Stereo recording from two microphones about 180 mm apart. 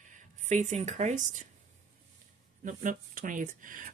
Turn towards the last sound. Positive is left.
turn(degrees=-50)  # may be behind; listen again after turning